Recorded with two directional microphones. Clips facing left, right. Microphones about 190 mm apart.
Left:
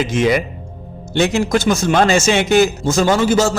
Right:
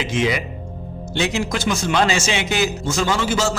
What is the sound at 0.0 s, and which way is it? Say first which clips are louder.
A man's voice: left 5 dB; 50° left (ahead or behind).